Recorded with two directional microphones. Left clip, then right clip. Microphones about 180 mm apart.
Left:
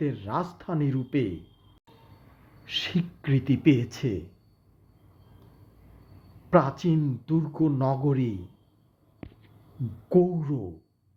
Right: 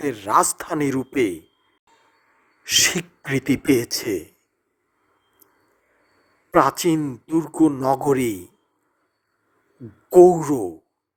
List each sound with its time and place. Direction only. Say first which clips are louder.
0.0 s speech: right 11 dB; 45° right (ahead or behind)
2.6 s speech: right 12 dB; 45° right (ahead or behind)
6.5 s speech: right 6 dB; 45° right (ahead or behind)
10.2 s speech: right 12 dB; 65° right (ahead or behind)